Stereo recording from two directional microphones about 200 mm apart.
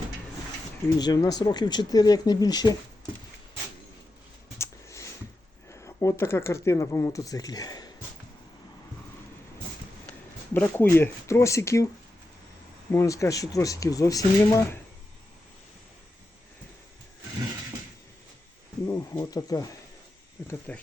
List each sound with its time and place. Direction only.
0.9 s speech: 20° left (ahead or behind)
4.5 s a sound: 15° left (ahead or behind)
5.6 s speech: 15° left (ahead or behind)
10.1 s speech: 10° left (ahead or behind)
12.9 s speech: 15° left (ahead or behind)
18.9 s speech: 15° left (ahead or behind)
20.5 s speech: 5° left (ahead or behind)